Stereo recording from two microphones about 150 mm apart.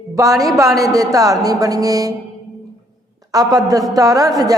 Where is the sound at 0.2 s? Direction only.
25° right (ahead or behind).